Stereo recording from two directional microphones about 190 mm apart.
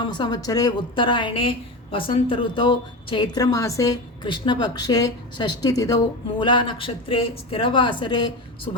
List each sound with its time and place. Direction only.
0.0 s a woman's voice: 25° left (ahead or behind)